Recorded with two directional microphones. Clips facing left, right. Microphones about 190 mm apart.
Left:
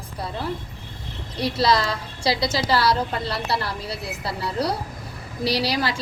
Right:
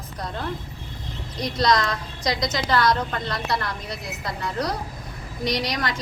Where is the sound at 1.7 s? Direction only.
30° left (ahead or behind).